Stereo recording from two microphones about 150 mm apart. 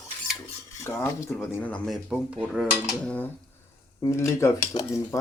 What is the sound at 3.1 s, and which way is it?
Speech, 10° left (ahead or behind).